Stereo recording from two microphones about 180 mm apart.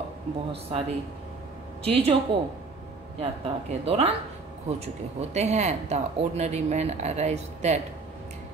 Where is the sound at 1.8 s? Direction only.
35° right (ahead or behind).